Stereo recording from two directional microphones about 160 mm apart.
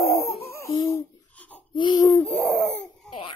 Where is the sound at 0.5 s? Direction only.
15° left (ahead or behind).